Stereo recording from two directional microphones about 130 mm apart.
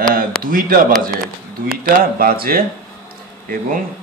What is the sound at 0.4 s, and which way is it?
Speech, 90° right.